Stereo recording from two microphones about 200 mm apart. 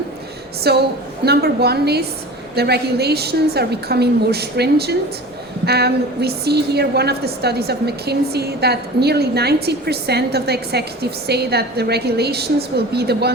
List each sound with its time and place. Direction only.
0.7 s a woman's voice: 55° right (ahead or behind)